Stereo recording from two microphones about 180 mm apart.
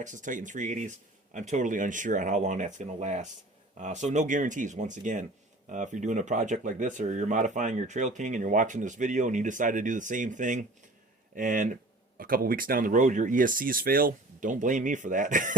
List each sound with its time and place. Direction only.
0.0 s speech: 45° right (ahead or behind)